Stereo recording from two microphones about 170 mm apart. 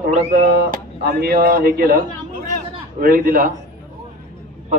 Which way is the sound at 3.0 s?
60° right (ahead or behind).